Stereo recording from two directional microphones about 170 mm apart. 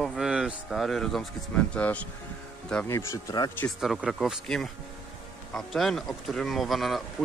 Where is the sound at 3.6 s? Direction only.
Centre (ahead or behind).